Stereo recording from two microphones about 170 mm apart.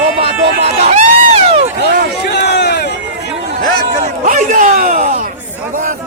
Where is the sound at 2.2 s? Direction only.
75° left (ahead or behind).